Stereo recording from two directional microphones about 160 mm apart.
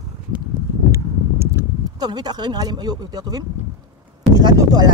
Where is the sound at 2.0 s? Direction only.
25° right (ahead or behind).